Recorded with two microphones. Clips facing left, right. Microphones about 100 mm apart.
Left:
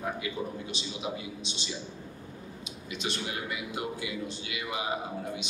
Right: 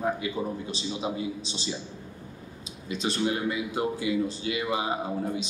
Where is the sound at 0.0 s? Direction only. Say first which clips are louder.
Right 5 dB; 35° right (ahead or behind).